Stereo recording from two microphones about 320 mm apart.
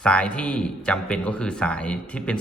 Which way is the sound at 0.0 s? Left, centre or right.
Centre.